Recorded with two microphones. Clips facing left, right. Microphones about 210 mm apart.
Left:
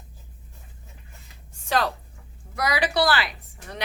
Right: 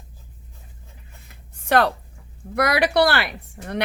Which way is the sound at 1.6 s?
60° right (ahead or behind).